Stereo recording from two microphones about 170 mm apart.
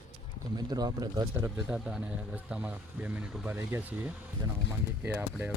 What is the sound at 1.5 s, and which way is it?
Speech, 5° right (ahead or behind).